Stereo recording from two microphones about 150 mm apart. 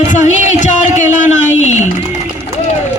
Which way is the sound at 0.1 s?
55° left (ahead or behind).